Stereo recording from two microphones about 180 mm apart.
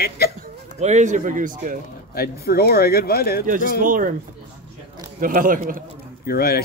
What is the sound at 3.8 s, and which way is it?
Speech, 50° right (ahead or behind).